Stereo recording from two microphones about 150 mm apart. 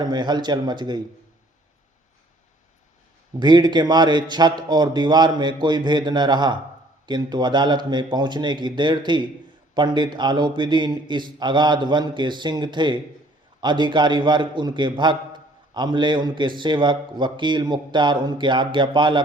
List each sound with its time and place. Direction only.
0.0 s a man's voice: 30° right (ahead or behind)
3.4 s a man's voice: 30° right (ahead or behind)